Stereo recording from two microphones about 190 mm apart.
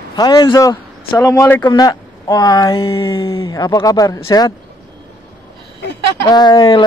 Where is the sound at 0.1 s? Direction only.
20° left (ahead or behind).